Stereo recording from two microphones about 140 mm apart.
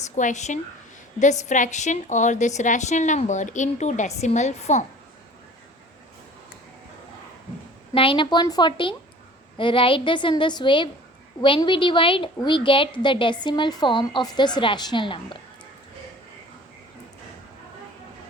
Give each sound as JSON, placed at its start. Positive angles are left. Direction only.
{"t": 0.0, "sound": "a woman's voice", "side_deg": 60}
{"t": 7.9, "sound": "a woman's voice", "side_deg": 40}